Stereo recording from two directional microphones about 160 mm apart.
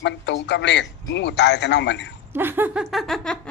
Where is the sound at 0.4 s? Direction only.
90° left.